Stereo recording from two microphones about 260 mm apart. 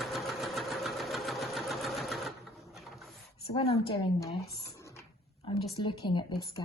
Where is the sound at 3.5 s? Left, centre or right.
Left.